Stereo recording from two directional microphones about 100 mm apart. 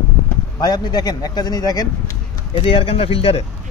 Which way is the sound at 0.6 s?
45° left (ahead or behind).